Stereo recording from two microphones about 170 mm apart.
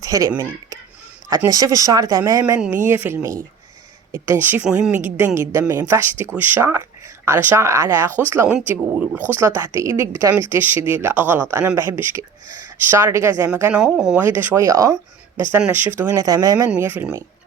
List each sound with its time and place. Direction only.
0.0 s speech: 20° right (ahead or behind)
2.4 s a woman's voice: 10° right (ahead or behind)